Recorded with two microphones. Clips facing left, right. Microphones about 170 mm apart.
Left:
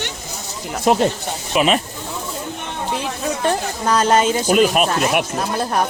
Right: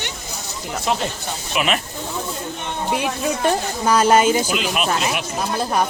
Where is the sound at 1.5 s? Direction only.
35° left (ahead or behind).